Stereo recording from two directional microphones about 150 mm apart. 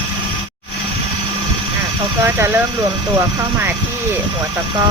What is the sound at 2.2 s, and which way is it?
Speech, 15° right (ahead or behind).